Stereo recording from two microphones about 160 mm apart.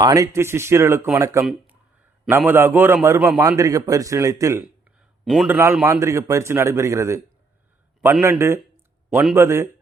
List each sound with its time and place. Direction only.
0.0 s speech: 20° right (ahead or behind)
1.5 s a sound: 10° right (ahead or behind)
2.4 s speech: 10° right (ahead or behind)
5.2 s a man's voice: centre (ahead or behind)
5.5 s speech: 15° right (ahead or behind)